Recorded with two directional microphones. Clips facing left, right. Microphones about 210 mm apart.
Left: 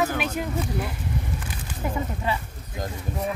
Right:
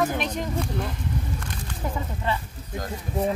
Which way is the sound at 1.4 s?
5° left (ahead or behind).